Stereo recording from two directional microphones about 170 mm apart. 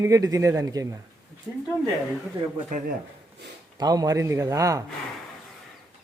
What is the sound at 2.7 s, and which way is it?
Speech, 45° right (ahead or behind).